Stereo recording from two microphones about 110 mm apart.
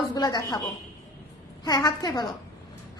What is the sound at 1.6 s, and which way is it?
Speech, 40° left (ahead or behind).